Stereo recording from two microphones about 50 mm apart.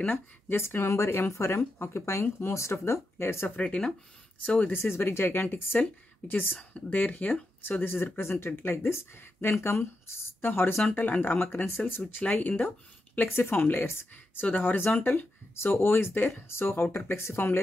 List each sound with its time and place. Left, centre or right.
0.5 s speech: left
1.6 s speech: left
3.4 s speech: left
4.7 s speech: left
6.2 s speech: left
6.7 s speech: left
7.8 s speech: left
11.0 s speech: left
13.3 s speech: left
14.1 s speech: left
15.5 s speech: left